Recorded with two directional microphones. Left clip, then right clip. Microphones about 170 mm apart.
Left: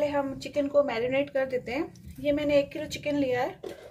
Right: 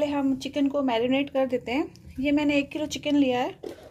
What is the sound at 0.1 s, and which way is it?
Speech, 50° right (ahead or behind).